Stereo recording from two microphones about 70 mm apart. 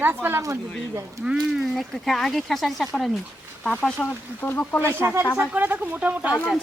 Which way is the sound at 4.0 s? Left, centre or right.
Left.